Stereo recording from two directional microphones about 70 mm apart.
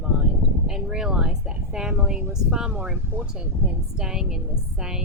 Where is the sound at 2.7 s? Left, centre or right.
Right.